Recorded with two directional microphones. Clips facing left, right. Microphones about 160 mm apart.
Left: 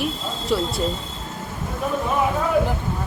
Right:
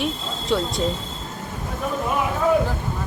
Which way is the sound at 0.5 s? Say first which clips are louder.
Even; 5° left (ahead or behind).